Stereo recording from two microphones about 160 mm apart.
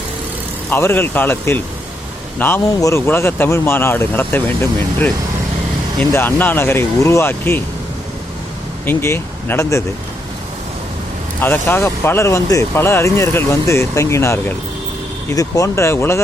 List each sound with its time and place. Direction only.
0.7 s speech: 15° left (ahead or behind)
6.0 s speech: 10° left (ahead or behind)
8.9 s speech: 15° left (ahead or behind)
11.3 s speech: 15° left (ahead or behind)
15.4 s speech: 20° left (ahead or behind)